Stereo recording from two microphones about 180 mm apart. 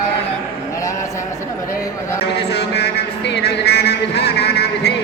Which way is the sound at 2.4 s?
65° left (ahead or behind).